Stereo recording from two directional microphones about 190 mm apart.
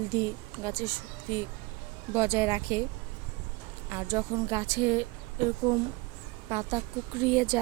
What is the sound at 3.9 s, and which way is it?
Speech, 20° right (ahead or behind).